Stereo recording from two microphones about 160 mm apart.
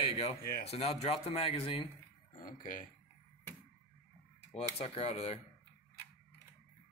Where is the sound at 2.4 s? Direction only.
55° left (ahead or behind).